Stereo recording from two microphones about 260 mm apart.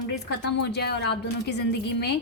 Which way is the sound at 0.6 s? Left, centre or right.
Left.